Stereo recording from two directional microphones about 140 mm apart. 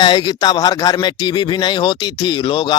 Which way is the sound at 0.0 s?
30° left (ahead or behind).